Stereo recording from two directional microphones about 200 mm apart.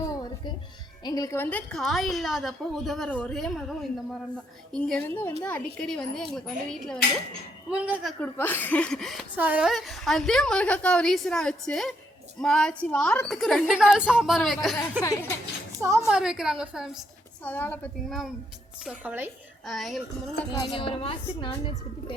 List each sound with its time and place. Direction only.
0.0 s music: 20° left (ahead or behind)
1.0 s a woman's voice: 15° left (ahead or behind)
7.7 s a woman's voice: 5° right (ahead or behind)
8.2 s a woman's voice: 10° left (ahead or behind)
15.0 s a woman's voice: 15° left (ahead or behind)
15.8 s a woman's voice: 15° right (ahead or behind)
16.1 s a woman's voice: 5° right (ahead or behind)
17.4 s a woman's voice: 10° left (ahead or behind)
18.1 s a woman's voice: centre (ahead or behind)
20.5 s speech: 20° left (ahead or behind)